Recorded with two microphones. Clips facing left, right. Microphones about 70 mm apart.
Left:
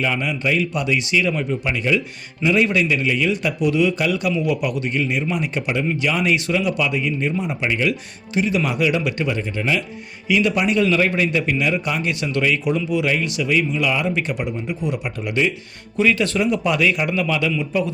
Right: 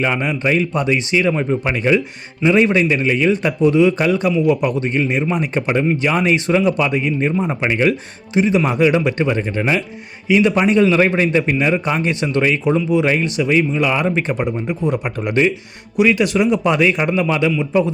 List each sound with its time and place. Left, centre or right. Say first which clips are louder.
0.0 s a man's voice: right 3 dB; right
2.4 s a man's voice: right 4 dB; right
4.3 s a man's voice: right 7 dB; centre
4.6 s a man's voice: right 4 dB; right
8.4 s a man's voice: right 5 dB; right
16.0 s a man's voice: right 4 dB; centre